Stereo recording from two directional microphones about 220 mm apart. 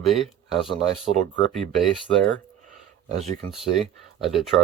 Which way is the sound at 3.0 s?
30° right (ahead or behind).